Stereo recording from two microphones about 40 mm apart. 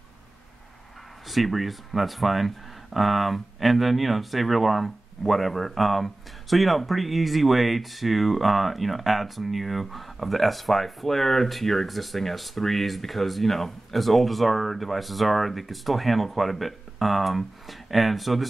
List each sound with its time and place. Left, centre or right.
1.3 s speech: centre